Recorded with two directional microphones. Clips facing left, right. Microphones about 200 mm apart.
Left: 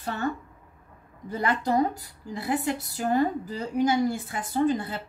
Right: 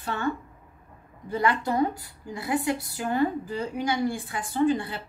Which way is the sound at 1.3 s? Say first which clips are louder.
Even; 40° left (ahead or behind).